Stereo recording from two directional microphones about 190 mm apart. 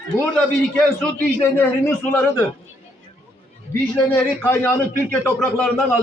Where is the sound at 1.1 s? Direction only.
10° left (ahead or behind).